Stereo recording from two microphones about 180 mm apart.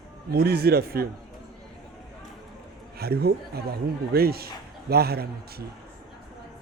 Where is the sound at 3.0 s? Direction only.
60° right (ahead or behind).